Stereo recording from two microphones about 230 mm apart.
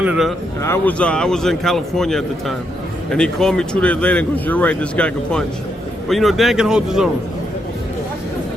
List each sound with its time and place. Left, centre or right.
0.0 s speech: centre
0.6 s speech: centre